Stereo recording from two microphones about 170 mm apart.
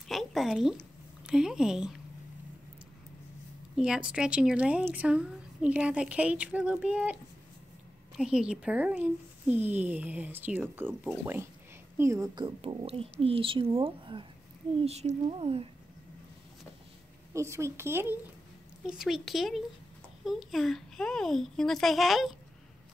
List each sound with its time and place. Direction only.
0.1 s speech: centre (ahead or behind)
3.7 s speech: 5° right (ahead or behind)
8.2 s speech: 5° right (ahead or behind)
12.0 s speech: 20° right (ahead or behind)
12.4 s speech: 35° right (ahead or behind)
17.3 s speech: 15° right (ahead or behind)
18.9 s speech: centre (ahead or behind)